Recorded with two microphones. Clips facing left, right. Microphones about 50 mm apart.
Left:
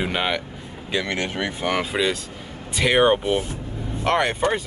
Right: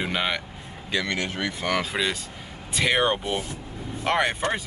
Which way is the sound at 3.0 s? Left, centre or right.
Centre.